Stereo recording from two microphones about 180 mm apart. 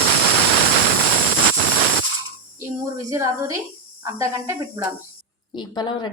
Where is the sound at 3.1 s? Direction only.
20° right (ahead or behind).